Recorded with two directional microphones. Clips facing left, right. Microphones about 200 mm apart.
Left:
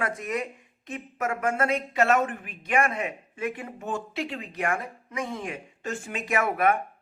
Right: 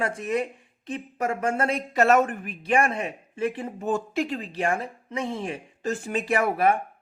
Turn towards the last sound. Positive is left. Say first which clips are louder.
# right 2 dB
turn(degrees=-30)  # may be behind; listen again after turning